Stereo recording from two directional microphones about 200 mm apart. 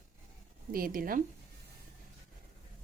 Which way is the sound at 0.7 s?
45° right (ahead or behind).